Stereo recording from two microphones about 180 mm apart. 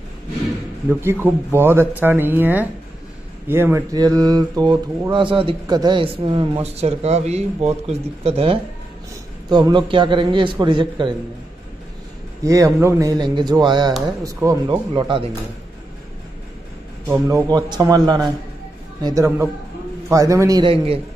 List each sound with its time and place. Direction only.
1.0 s speech: 15° right (ahead or behind)
12.4 s speech: 15° right (ahead or behind)
17.3 s speech: 20° right (ahead or behind)